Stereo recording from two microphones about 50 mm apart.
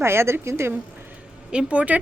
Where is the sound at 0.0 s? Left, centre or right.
Right.